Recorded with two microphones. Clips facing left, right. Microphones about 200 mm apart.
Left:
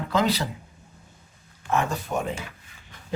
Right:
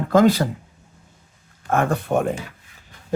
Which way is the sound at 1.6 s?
55° right (ahead or behind).